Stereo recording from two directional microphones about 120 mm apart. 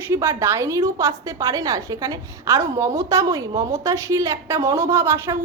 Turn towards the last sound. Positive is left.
turn(degrees=-20)  # may be behind; listen again after turning